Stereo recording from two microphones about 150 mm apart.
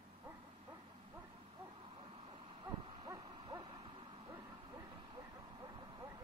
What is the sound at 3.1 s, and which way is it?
Hoot, 25° right (ahead or behind).